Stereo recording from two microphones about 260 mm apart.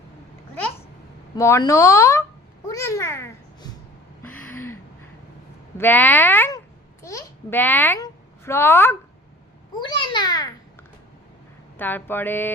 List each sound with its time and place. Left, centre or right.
1.4 s speech: centre
2.6 s babbling: centre
4.2 s a sound: centre
5.7 s a child's voice: centre
9.8 s babbling: centre
11.8 s speech: centre